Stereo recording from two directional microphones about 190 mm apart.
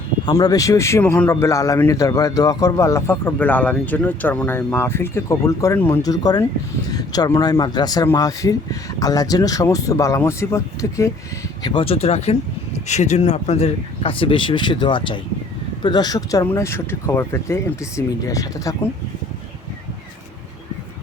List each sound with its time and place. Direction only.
0.3 s a man's voice: 20° left (ahead or behind)
11.6 s a man's voice: 25° left (ahead or behind)